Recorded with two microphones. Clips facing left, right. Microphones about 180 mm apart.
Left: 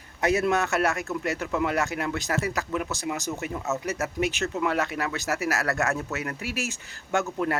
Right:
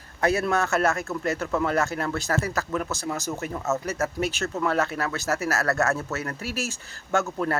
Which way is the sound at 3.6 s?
15° left (ahead or behind).